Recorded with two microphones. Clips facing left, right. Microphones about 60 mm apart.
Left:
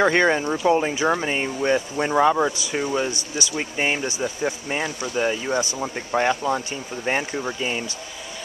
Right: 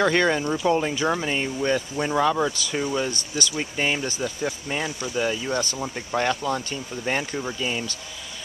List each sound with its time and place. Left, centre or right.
0.0 s speech: centre